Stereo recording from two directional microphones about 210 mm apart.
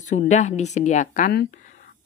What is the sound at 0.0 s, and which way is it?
Speech, 35° left (ahead or behind).